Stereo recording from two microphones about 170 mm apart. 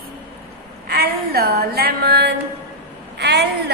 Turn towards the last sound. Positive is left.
turn(degrees=-75)  # may be behind; listen again after turning